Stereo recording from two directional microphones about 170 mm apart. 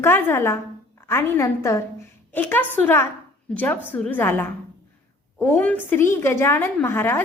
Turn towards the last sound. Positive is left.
turn(degrees=15)  # may be behind; listen again after turning